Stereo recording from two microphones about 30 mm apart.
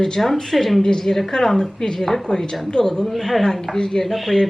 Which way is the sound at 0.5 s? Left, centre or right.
Centre.